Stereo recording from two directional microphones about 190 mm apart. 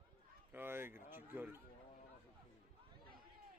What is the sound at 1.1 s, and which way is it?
Speech, 10° right (ahead or behind).